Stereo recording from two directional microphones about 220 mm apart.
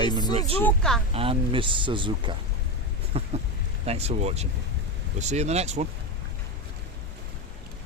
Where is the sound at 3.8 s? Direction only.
30° right (ahead or behind).